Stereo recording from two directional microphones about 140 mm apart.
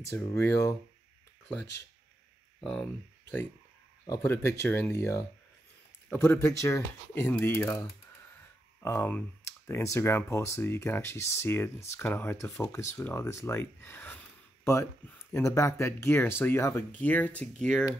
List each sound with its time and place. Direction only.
0.1 s speech: 20° left (ahead or behind)
2.6 s speech: 5° left (ahead or behind)
4.0 s speech: 20° left (ahead or behind)
8.8 s speech: 15° left (ahead or behind)